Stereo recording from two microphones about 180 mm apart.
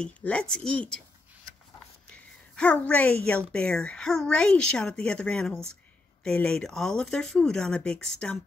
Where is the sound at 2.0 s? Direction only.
5° left (ahead or behind).